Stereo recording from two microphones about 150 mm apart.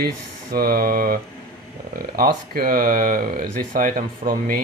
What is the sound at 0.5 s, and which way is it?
Speech, 80° right.